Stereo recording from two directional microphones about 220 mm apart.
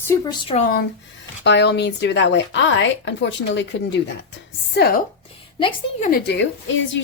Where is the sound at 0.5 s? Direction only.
40° left (ahead or behind).